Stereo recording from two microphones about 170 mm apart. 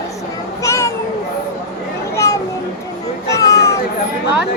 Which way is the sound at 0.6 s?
15° left (ahead or behind).